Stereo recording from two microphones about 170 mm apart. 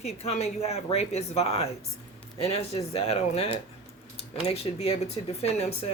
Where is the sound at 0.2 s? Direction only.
40° left (ahead or behind).